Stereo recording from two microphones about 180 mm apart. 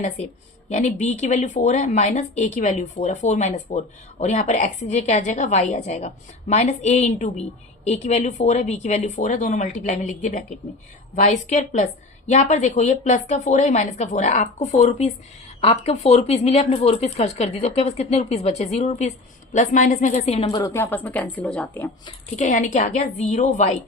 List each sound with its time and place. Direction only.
0.7 s a woman's voice: 40° left (ahead or behind)
20.5 s a woman's voice: 15° left (ahead or behind)
22.4 s speech: 45° left (ahead or behind)